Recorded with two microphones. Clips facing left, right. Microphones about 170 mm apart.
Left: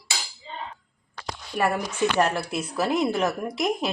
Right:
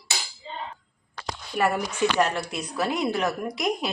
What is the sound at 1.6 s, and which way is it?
Speech, 5° right (ahead or behind).